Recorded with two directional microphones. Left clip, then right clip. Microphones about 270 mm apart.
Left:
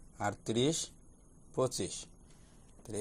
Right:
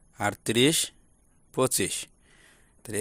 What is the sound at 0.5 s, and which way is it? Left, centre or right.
Speech, right.